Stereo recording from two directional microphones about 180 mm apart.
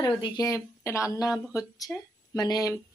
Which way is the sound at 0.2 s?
20° left (ahead or behind).